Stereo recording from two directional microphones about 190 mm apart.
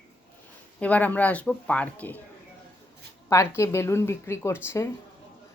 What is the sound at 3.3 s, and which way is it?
Speech, 15° left (ahead or behind).